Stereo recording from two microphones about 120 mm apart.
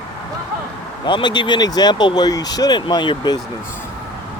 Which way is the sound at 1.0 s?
40° left (ahead or behind).